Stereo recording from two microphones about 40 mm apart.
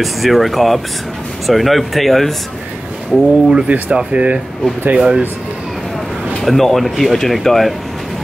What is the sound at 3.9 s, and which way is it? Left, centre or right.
Speech, right.